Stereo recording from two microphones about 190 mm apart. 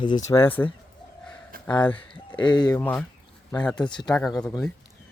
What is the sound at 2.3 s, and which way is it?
Speech, 25° left (ahead or behind).